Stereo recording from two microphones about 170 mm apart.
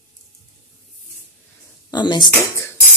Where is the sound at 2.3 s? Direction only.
15° left (ahead or behind).